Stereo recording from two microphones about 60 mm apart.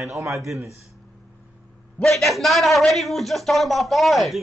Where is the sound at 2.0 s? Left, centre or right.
Centre.